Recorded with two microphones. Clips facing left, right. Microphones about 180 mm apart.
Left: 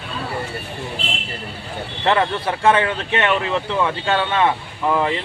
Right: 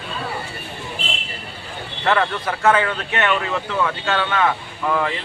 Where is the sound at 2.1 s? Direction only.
25° left (ahead or behind).